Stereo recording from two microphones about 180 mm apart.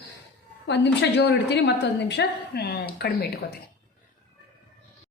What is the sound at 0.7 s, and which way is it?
A woman's voice, 75° left (ahead or behind).